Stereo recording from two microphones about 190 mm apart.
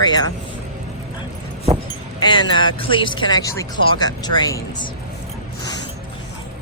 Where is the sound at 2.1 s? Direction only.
20° left (ahead or behind).